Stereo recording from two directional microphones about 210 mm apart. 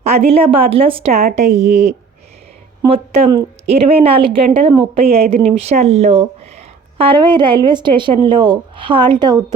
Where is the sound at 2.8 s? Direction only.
30° right (ahead or behind).